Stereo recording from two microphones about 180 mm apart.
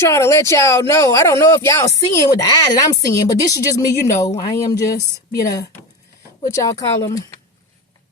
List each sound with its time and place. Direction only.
0.0 s speech: 15° left (ahead or behind)